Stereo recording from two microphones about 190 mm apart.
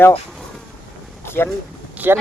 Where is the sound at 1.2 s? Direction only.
10° left (ahead or behind).